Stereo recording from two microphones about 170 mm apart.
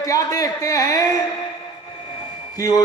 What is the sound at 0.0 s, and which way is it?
A man's voice, 20° left (ahead or behind).